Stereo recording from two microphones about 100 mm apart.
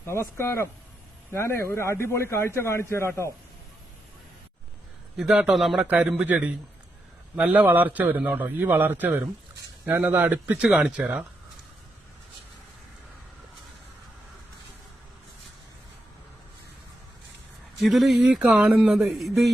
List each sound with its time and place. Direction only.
0.0 s speech: 25° left (ahead or behind)
5.1 s speech: 5° right (ahead or behind)
5.8 s a man's voice: 15° right (ahead or behind)
17.8 s speech: centre (ahead or behind)